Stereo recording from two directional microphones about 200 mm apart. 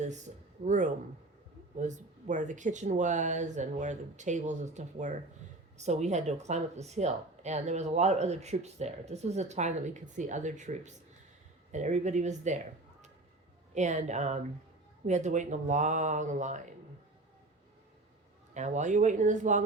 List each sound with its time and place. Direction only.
0.6 s speech: 40° right (ahead or behind)
13.7 s speech: 35° right (ahead or behind)
18.5 s speech: 35° right (ahead or behind)